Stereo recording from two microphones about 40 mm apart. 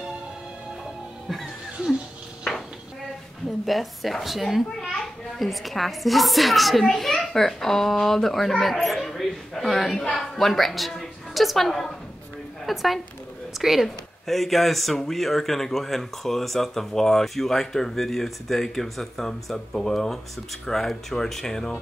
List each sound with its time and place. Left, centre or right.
3.4 s a woman's voice: centre